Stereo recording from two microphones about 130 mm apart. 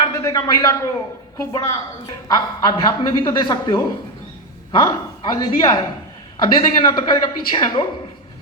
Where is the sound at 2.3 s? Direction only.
30° left (ahead or behind).